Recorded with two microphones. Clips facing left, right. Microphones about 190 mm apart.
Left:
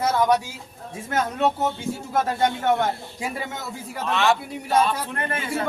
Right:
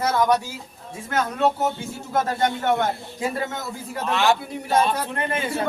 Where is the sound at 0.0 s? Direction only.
10° left (ahead or behind).